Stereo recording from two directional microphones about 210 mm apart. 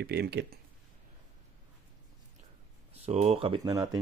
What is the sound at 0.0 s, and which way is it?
Speech, 50° right (ahead or behind).